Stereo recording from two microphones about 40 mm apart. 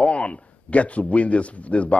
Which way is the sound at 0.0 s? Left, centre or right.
Left.